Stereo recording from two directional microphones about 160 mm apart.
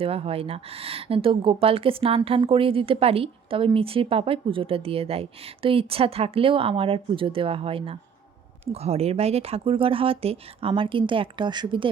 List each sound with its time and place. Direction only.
0.0 s speech: 35° right (ahead or behind)